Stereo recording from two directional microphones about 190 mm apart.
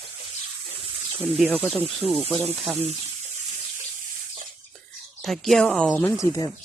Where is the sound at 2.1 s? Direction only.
30° right (ahead or behind).